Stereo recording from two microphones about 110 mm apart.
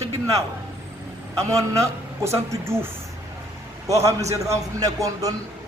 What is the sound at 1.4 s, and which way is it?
A man's voice, 25° right (ahead or behind).